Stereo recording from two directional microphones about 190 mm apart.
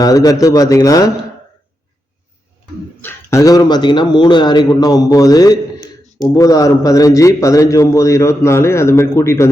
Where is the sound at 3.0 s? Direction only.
15° left (ahead or behind).